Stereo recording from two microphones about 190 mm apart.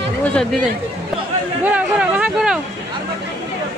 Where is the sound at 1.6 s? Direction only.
10° right (ahead or behind).